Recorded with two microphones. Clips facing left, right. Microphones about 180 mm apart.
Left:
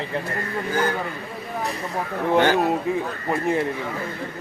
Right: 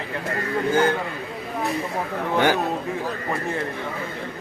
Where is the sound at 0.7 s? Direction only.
25° right (ahead or behind).